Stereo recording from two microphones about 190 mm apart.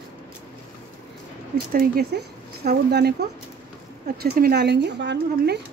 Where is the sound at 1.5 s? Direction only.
50° right (ahead or behind).